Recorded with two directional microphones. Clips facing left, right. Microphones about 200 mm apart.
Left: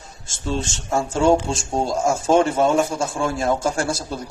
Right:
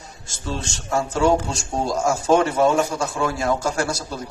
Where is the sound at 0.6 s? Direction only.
25° left (ahead or behind).